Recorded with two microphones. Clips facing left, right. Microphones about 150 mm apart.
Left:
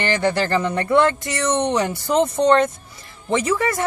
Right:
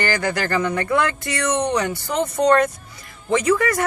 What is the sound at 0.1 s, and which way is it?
Speech, 30° left (ahead or behind).